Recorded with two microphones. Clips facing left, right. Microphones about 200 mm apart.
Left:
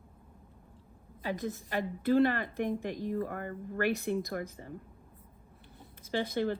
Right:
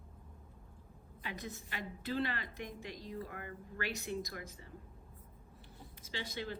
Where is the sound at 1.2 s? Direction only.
50° left (ahead or behind).